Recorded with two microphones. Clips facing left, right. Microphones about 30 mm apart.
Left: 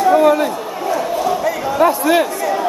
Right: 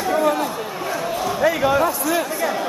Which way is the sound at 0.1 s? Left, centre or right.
Left.